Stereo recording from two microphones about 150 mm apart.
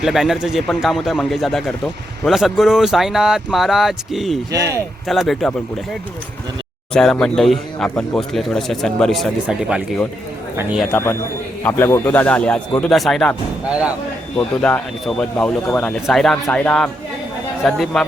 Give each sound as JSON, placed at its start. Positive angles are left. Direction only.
{"t": 0.0, "sound": "speech", "side_deg": 0}
{"t": 4.5, "sound": "speech", "side_deg": -20}
{"t": 5.0, "sound": "speech", "side_deg": 0}
{"t": 10.9, "sound": "speech", "side_deg": 15}
{"t": 13.7, "sound": "speech", "side_deg": -10}
{"t": 14.3, "sound": "speech", "side_deg": 5}